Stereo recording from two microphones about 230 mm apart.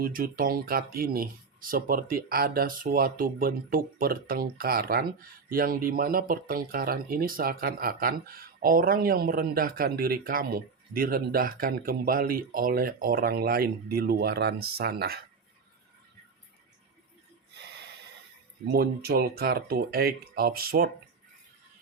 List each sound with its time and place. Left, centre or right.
0.0 s speech: right
18.7 s speech: right